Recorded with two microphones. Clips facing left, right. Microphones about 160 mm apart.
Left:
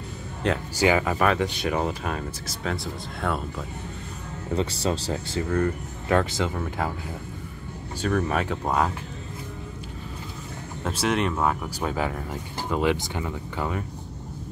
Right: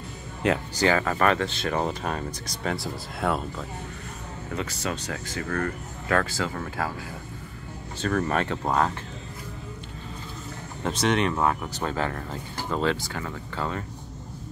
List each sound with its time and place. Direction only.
0.4 s speech: 5° right (ahead or behind)
0.7 s speech: 15° left (ahead or behind)
4.6 s speech: 30° left (ahead or behind)
5.5 s speech: 20° left (ahead or behind)
8.0 s speech: 5° left (ahead or behind)
10.8 s speech: 5° left (ahead or behind)